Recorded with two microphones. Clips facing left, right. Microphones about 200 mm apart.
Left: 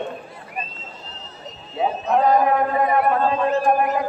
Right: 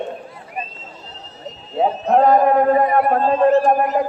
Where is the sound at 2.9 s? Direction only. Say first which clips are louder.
Right 3 dB; 40° right (ahead or behind).